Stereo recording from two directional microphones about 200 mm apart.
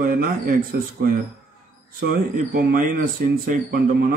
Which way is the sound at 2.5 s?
45° right (ahead or behind).